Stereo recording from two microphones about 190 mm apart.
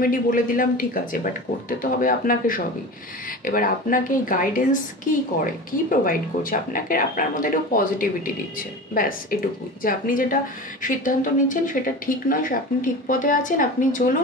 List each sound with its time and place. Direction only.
0.0 s a woman's voice: 45° left (ahead or behind)